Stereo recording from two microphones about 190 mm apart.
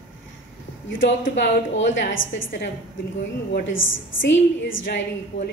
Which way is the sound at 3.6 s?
90° left.